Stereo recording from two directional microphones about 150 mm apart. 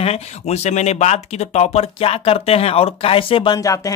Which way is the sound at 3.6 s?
20° left (ahead or behind).